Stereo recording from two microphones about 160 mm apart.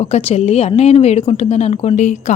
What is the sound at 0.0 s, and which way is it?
Speech, 40° left (ahead or behind).